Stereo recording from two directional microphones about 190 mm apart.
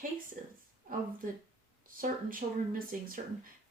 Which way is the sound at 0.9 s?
45° right (ahead or behind).